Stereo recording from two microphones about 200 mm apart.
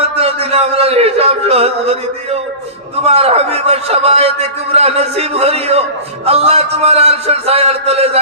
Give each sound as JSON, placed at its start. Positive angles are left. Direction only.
{"t": 0.2, "sound": "a man's voice", "side_deg": -30}